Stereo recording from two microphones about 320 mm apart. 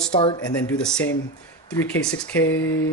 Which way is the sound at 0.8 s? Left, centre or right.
Centre.